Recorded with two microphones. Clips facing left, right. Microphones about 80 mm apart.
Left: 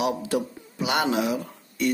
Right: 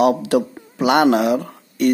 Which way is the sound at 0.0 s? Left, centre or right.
Right.